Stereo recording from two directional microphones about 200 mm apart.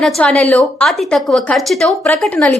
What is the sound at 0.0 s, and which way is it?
A woman's voice, 5° left (ahead or behind).